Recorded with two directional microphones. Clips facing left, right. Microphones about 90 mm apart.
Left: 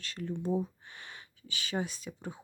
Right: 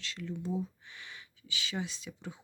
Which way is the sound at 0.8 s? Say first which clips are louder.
Left 1 dB; 45° left (ahead or behind).